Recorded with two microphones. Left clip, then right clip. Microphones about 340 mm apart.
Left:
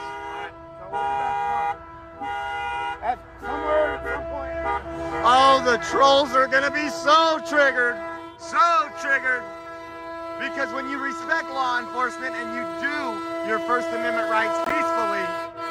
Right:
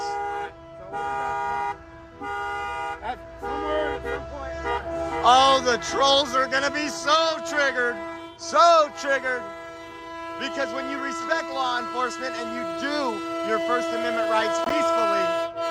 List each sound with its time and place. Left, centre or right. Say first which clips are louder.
0.9 s toot: left 3 dB; centre
2.2 s vehicle: left 1 dB; centre
3.4 s music: left 4 dB; centre
5.2 s speech: left 1 dB; centre
10.4 s speech: left 1 dB; centre